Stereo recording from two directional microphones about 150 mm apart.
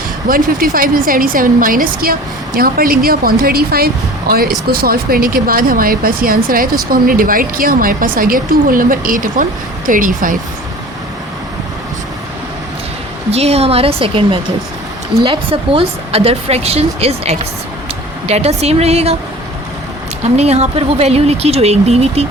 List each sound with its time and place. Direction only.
0.3 s speech: 70° right (ahead or behind)
13.3 s a woman's voice: 45° right (ahead or behind)
20.2 s speech: 45° right (ahead or behind)